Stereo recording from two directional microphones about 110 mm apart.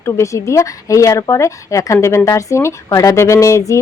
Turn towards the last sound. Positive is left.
turn(degrees=25)  # may be behind; listen again after turning